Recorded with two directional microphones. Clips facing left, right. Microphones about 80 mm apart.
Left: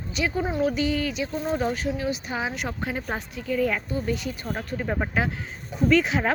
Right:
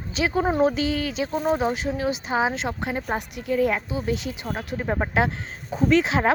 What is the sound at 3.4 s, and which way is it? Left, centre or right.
Speech, right.